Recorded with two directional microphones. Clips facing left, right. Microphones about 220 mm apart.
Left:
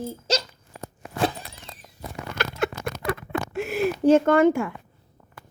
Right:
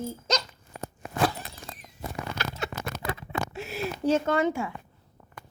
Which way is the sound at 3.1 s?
55° left (ahead or behind).